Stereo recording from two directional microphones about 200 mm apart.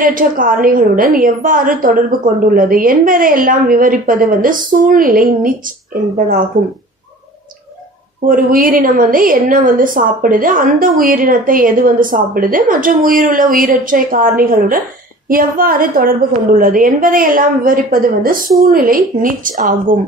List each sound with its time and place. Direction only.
0.0 s a woman's voice: 45° right (ahead or behind)
8.3 s a woman's voice: 45° right (ahead or behind)